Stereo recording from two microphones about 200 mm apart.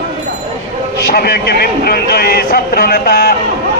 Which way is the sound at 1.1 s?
50° left (ahead or behind).